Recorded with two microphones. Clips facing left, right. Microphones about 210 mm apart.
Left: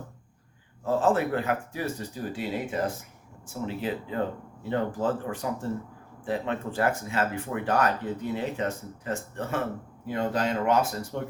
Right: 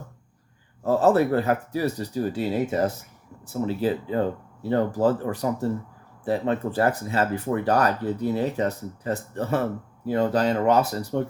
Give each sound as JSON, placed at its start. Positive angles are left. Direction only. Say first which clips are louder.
{"t": 0.9, "sound": "speech", "louder": "right 5 dB", "side_deg": -40}